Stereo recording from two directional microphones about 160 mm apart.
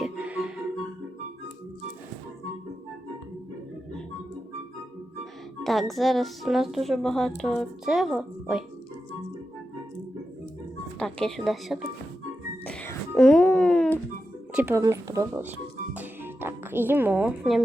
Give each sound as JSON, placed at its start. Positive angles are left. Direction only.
{"t": 0.0, "sound": "music", "side_deg": -5}
{"t": 5.6, "sound": "a woman's voice", "side_deg": 0}
{"t": 11.0, "sound": "a woman's voice", "side_deg": 0}
{"t": 12.6, "sound": "music", "side_deg": 10}
{"t": 13.1, "sound": "speech", "side_deg": 5}
{"t": 14.5, "sound": "speech", "side_deg": -15}
{"t": 16.0, "sound": "music", "side_deg": -15}